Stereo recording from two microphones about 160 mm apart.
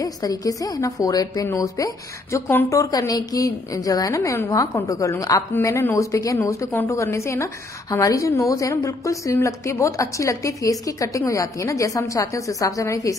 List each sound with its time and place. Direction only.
0.0 s a woman's voice: 20° left (ahead or behind)